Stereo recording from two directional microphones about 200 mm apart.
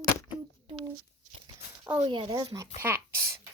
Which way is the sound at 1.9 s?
20° right (ahead or behind).